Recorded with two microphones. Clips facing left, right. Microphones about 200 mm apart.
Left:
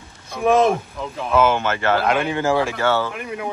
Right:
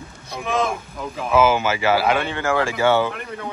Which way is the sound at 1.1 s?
5° right (ahead or behind).